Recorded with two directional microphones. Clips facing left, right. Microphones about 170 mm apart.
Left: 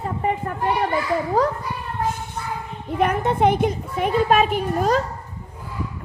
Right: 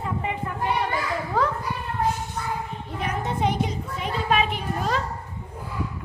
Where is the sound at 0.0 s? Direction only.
45° left (ahead or behind).